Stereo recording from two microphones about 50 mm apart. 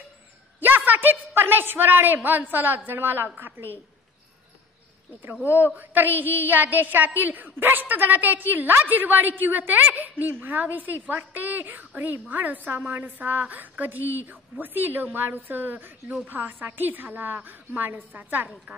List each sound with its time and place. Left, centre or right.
0.6 s a woman's voice: right
5.8 s a woman's voice: right